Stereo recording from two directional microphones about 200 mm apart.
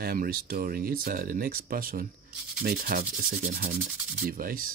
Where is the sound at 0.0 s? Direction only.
50° right (ahead or behind).